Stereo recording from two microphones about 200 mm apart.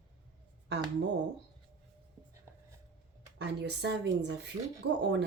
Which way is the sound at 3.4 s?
55° right (ahead or behind).